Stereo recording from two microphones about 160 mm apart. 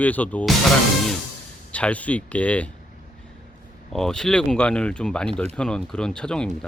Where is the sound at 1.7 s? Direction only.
10° left (ahead or behind).